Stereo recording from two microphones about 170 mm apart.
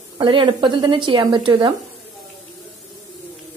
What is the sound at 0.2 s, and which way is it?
Speech, 30° right (ahead or behind).